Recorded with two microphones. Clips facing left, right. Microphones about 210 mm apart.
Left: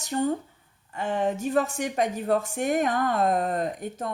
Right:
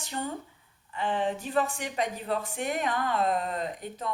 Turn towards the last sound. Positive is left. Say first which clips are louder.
# left 5 dB
turn(degrees=50)  # may be behind; listen again after turning